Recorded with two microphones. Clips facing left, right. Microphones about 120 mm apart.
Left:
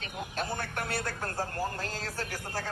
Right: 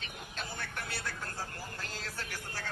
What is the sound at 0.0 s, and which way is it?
Speech, 45° left (ahead or behind).